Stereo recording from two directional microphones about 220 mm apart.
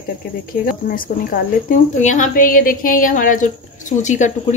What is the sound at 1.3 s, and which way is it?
Speech, 35° left (ahead or behind).